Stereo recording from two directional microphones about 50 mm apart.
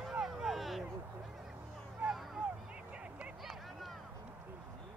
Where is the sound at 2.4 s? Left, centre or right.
Right.